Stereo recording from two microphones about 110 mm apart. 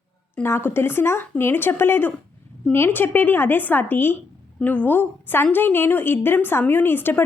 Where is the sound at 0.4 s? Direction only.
20° left (ahead or behind).